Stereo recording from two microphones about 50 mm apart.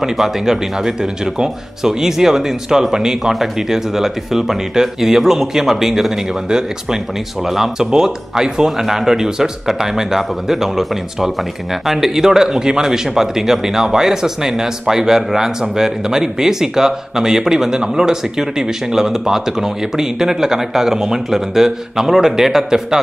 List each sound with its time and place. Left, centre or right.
0.0 s speech: centre